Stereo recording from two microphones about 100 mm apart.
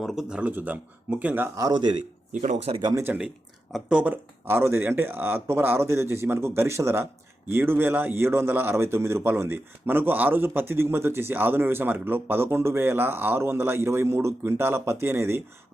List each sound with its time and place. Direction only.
0.0 s speech: centre (ahead or behind)
1.5 s a man's voice: 40° right (ahead or behind)
2.6 s speech: 90° right
3.0 s a man's voice: 15° right (ahead or behind)